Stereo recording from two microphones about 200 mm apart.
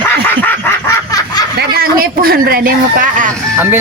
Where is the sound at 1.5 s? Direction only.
50° right (ahead or behind).